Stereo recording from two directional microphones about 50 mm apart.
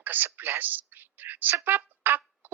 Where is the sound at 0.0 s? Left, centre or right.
Right.